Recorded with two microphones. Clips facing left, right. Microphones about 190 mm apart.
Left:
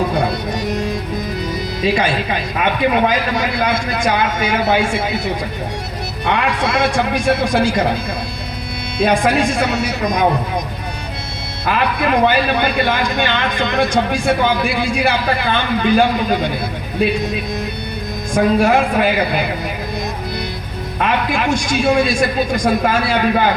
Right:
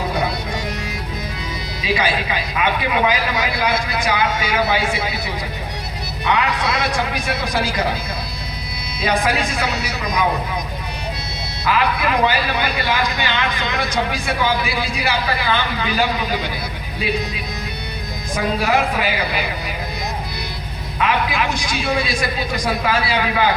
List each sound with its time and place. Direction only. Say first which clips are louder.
1.8 s a man's voice: left 3 dB; 50° left (ahead or behind)
9.0 s a man's voice: left 5 dB; 50° left (ahead or behind)
11.6 s a man's voice: left 2 dB; 55° left (ahead or behind)
18.3 s a man's voice: left 6 dB; 50° left (ahead or behind)
21.0 s a man's voice: left 2 dB; 50° left (ahead or behind)